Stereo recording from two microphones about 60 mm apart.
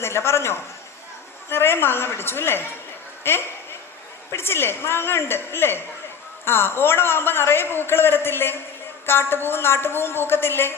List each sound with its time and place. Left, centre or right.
0.0 s a man's voice: left
3.2 s a sound: left
4.3 s a man's voice: left